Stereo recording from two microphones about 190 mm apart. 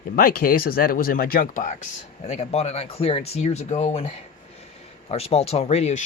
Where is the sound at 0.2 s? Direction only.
50° left (ahead or behind).